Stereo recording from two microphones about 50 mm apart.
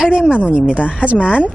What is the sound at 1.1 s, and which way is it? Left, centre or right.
Speech, left.